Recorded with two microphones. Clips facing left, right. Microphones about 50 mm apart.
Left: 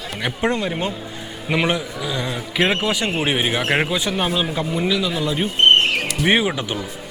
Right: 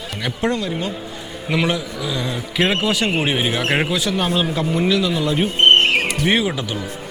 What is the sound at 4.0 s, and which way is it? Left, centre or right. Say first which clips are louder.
A man's voice: right 1 dB; centre.